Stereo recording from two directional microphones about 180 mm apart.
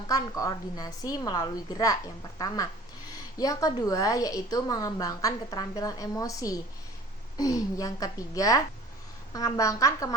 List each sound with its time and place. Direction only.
0.1 s a woman's voice: 20° left (ahead or behind)
3.3 s a woman's voice: 20° left (ahead or behind)